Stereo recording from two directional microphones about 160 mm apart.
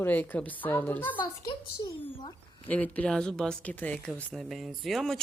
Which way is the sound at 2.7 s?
10° left (ahead or behind).